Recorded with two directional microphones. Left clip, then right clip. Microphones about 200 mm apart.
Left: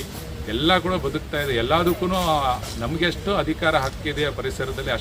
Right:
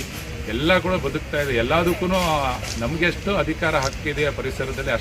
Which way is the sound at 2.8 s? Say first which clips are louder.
Right 2 dB; 20° left (ahead or behind).